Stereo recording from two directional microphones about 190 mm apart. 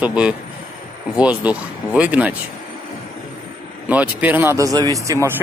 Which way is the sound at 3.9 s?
10° right (ahead or behind).